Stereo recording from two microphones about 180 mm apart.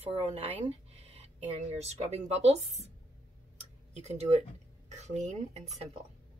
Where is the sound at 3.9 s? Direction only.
35° right (ahead or behind).